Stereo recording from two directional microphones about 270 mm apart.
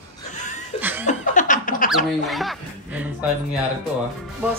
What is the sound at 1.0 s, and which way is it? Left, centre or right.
Laughter, left.